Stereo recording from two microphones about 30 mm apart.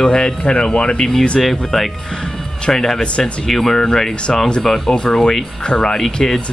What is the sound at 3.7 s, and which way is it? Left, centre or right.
Speech, left.